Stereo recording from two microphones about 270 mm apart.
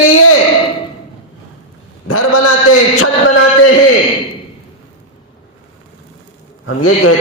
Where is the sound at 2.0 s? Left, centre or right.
Left.